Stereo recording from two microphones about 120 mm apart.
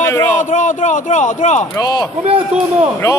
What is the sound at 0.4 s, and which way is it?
A man's voice, 90° left.